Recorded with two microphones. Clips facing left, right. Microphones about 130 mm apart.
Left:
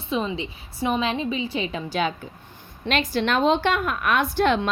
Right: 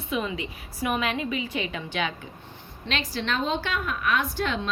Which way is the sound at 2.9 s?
50° left (ahead or behind).